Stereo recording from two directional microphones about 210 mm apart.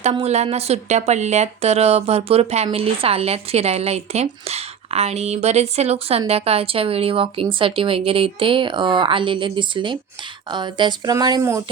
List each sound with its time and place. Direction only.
0.0 s speech: 30° right (ahead or behind)